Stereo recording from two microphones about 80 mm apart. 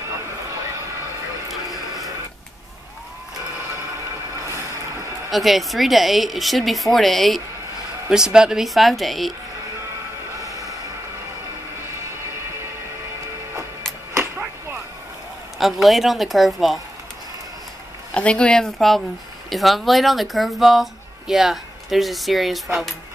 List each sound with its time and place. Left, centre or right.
1.5 s a sound: centre
5.3 s speech: centre
8.1 s speech: centre
10.4 s a sound: right
15.6 s speech: centre
18.1 s speech: centre